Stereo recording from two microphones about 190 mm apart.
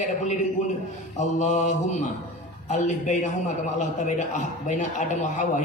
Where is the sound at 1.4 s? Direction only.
40° left (ahead or behind).